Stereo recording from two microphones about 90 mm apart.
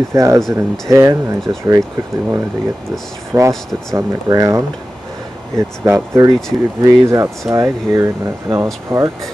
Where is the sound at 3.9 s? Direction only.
40° right (ahead or behind).